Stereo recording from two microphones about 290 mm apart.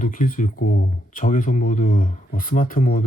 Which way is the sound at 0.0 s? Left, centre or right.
Left.